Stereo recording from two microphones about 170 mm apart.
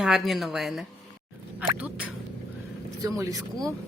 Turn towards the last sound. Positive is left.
turn(degrees=-20)  # may be behind; listen again after turning